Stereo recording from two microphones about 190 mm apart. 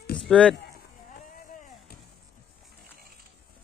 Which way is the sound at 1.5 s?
40° left (ahead or behind).